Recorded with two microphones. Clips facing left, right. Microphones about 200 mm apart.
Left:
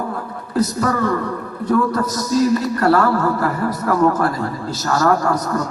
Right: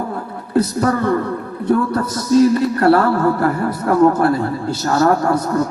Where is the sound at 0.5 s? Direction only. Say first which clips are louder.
Right 3 dB; 30° right (ahead or behind).